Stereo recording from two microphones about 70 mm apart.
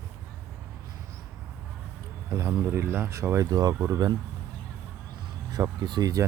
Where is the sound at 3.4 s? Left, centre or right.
Right.